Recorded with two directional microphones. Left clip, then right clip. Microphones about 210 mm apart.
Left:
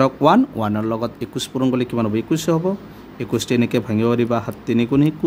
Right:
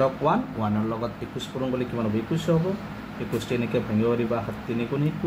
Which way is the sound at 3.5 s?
60° left (ahead or behind).